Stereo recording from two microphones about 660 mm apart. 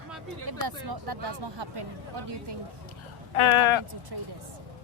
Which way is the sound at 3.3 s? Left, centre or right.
Left.